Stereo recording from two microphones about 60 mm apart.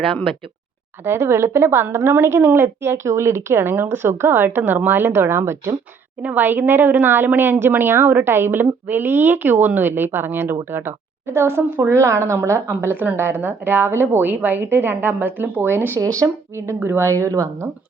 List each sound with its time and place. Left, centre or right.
1.0 s a woman's voice: right
6.2 s a woman's voice: right
16.0 s speech: right